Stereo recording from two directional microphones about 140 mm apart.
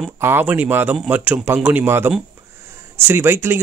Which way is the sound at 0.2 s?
15° right (ahead or behind).